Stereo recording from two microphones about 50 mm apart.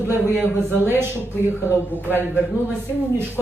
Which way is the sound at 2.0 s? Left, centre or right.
Left.